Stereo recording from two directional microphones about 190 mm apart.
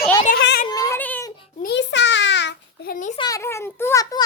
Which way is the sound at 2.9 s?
40° left (ahead or behind).